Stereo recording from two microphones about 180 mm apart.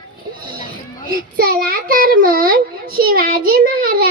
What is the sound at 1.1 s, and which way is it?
Child singing, 55° right (ahead or behind).